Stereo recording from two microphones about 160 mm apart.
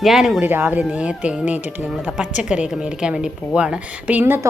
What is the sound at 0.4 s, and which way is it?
A woman's voice, 10° right (ahead or behind).